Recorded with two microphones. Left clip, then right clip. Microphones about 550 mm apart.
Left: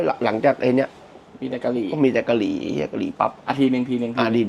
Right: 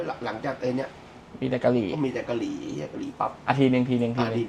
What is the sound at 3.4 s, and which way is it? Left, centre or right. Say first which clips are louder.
Speech: left 2 dB; centre.